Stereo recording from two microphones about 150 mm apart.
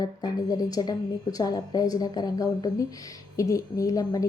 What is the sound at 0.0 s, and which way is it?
Speech, 25° left (ahead or behind).